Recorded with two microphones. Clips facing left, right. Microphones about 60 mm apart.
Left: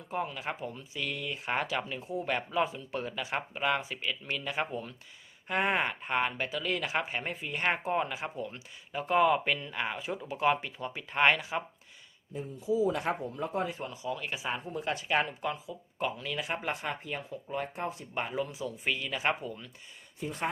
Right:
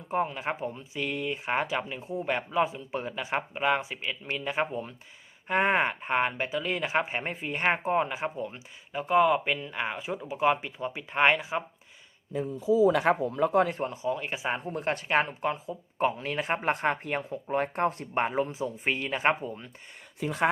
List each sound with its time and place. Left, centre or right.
0.1 s speech: right
8.9 s speech: centre
12.9 s speech: right
13.7 s speech: right
14.7 s speech: right
20.1 s speech: right